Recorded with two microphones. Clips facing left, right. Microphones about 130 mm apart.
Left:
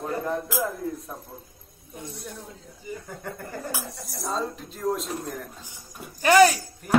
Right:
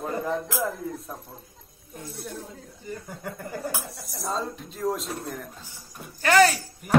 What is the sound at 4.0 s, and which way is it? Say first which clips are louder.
Speech: left 1 dB; centre (ahead or behind).